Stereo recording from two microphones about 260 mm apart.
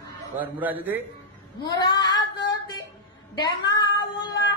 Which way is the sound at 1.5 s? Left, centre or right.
Centre.